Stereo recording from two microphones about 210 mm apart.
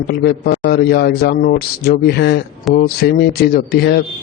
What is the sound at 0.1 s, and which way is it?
Speech, 50° left (ahead or behind).